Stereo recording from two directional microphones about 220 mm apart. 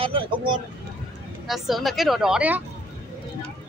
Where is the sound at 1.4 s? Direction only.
Centre (ahead or behind).